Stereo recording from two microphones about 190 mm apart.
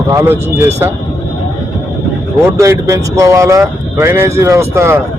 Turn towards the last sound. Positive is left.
turn(degrees=-15)  # may be behind; listen again after turning